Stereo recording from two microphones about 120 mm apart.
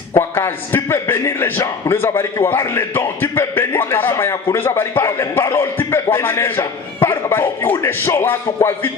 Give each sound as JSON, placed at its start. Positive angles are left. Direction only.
{"t": 0.1, "sound": "a man's voice", "side_deg": 20}